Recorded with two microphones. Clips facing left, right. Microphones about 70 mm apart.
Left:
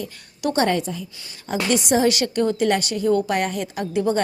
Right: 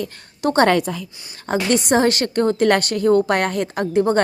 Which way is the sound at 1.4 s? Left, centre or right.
Right.